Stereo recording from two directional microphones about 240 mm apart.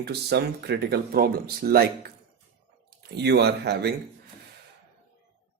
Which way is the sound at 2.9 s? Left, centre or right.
Right.